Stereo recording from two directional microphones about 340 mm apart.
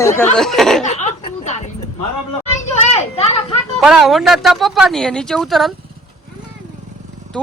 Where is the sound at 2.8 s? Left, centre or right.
Centre.